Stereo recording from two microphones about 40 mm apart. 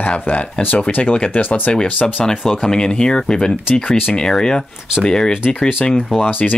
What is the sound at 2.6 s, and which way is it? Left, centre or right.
Speech, centre.